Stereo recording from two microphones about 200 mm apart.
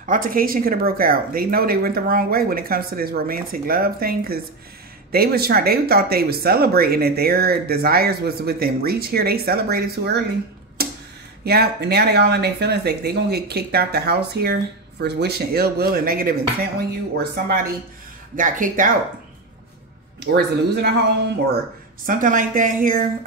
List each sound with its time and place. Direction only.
0.0 s speech: 40° right (ahead or behind)
10.8 s a sound: 50° right (ahead or behind)
11.4 s speech: 50° right (ahead or behind)
20.2 s speech: 55° right (ahead or behind)
22.0 s speech: 40° right (ahead or behind)